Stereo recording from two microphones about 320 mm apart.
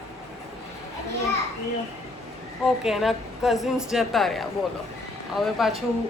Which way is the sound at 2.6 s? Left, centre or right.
Centre.